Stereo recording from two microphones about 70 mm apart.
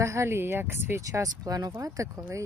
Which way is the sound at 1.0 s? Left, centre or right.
Right.